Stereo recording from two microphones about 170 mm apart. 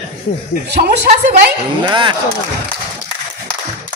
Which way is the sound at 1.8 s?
30° right (ahead or behind).